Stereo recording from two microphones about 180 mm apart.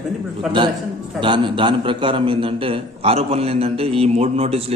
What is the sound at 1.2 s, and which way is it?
A man's voice, 25° right (ahead or behind).